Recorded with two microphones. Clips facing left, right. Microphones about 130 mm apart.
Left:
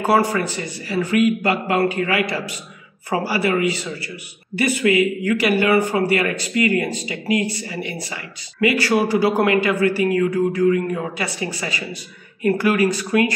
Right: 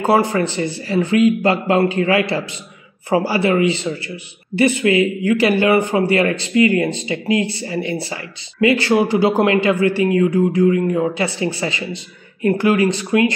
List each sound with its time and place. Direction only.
0.0 s speech: 25° right (ahead or behind)